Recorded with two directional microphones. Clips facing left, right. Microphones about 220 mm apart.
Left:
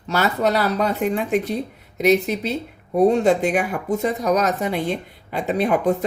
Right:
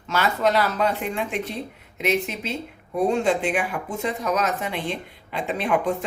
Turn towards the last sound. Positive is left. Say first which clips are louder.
# left 4 dB
turn(degrees=40)  # may be behind; listen again after turning